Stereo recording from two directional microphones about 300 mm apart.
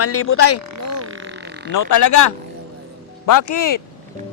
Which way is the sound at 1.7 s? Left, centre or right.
Left.